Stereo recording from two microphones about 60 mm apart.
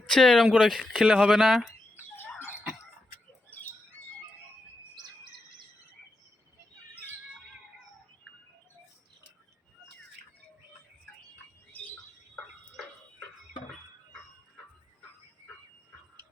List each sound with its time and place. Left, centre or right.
0.1 s speech: centre
2.1 s a sound: left
11.7 s bird: left